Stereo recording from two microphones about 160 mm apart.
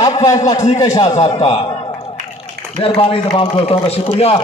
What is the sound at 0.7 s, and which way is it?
Speech, 25° left (ahead or behind).